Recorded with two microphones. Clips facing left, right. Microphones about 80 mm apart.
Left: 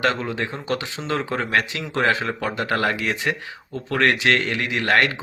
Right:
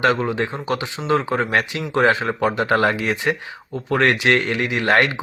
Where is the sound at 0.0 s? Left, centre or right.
Right.